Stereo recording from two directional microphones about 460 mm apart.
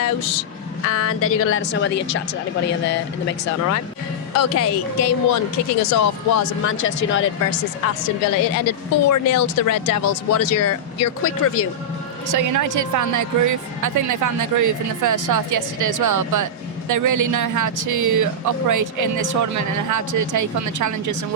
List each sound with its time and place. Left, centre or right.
0.0 s speech: left
8.2 s speech: left
12.3 s a woman's voice: right